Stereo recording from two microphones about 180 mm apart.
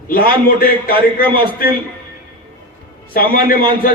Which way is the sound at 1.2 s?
25° right (ahead or behind).